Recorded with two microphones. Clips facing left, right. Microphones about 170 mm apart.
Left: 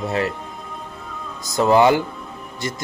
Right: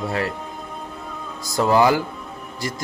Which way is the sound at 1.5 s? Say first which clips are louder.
Left 2 dB; 20° left (ahead or behind).